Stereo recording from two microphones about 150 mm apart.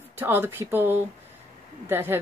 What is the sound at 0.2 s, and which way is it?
Speech, 15° right (ahead or behind).